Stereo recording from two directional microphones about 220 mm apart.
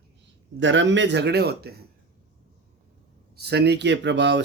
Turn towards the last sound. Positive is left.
turn(degrees=-55)  # may be behind; listen again after turning